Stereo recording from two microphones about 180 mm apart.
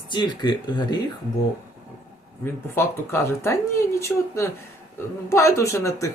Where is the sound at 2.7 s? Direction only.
15° left (ahead or behind).